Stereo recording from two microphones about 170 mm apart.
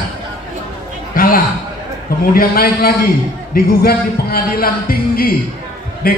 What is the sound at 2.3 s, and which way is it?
A man's voice, 60° left (ahead or behind).